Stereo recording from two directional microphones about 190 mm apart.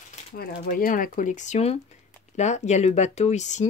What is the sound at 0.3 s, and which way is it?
Speech, 55° left (ahead or behind).